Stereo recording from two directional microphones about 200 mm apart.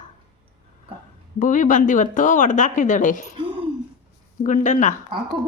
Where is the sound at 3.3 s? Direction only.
25° right (ahead or behind).